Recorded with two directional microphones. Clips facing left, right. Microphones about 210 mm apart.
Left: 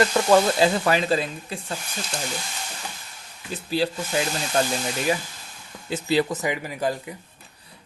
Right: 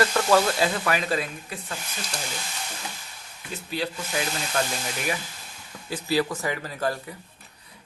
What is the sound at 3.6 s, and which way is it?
Speech, 30° left (ahead or behind).